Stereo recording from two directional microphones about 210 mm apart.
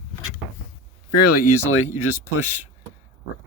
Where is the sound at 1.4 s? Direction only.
80° left.